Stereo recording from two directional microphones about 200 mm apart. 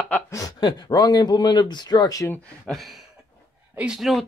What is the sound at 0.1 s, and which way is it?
Speech, 15° left (ahead or behind).